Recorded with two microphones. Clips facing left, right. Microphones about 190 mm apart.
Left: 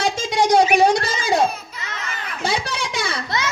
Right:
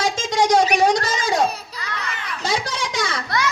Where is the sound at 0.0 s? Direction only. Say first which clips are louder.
Even; 60° left (ahead or behind).